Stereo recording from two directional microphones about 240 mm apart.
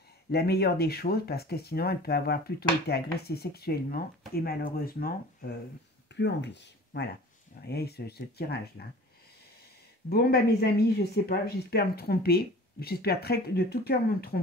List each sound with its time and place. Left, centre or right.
0.3 s speech: left
6.1 s speech: left
10.0 s speech: left